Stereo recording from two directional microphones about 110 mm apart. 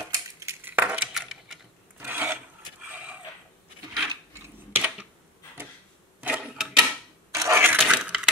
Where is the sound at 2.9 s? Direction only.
15° right (ahead or behind).